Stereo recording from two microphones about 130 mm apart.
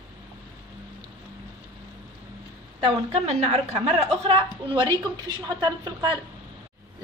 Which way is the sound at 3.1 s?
65° right (ahead or behind).